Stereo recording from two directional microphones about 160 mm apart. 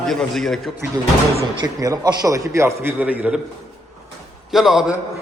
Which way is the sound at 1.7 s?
20° right (ahead or behind).